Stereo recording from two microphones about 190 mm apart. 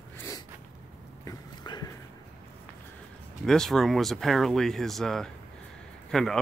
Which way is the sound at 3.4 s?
Centre (ahead or behind).